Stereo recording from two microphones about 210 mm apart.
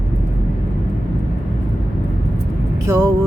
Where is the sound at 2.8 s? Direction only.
15° right (ahead or behind).